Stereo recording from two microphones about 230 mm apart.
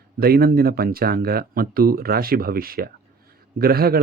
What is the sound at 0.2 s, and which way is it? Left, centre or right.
A man's voice, right.